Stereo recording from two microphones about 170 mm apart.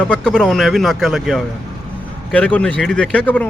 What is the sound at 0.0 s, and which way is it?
A man's voice, 5° left (ahead or behind).